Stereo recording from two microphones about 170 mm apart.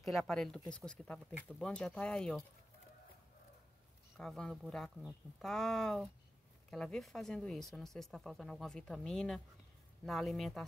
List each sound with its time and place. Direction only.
0.0 s speech: centre (ahead or behind)
4.2 s speech: 5° left (ahead or behind)